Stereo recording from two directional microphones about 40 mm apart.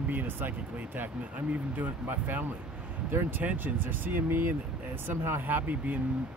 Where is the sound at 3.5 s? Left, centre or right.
Right.